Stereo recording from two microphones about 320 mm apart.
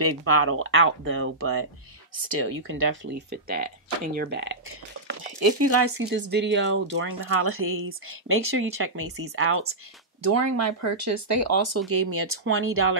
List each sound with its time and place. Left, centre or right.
0.0 s speech: right
5.7 s speech: right
6.0 s speech: right
10.2 s speech: right